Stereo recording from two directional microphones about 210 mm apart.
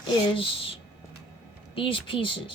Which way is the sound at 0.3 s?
25° left (ahead or behind).